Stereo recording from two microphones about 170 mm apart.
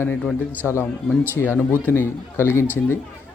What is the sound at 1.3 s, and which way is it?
Speech, 15° left (ahead or behind).